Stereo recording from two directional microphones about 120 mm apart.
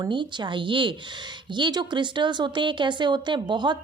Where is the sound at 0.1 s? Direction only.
40° right (ahead or behind).